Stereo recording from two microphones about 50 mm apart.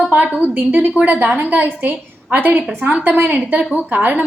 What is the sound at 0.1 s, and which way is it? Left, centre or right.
A woman's voice, right.